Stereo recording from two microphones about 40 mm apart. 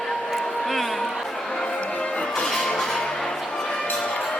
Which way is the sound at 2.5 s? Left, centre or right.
Centre.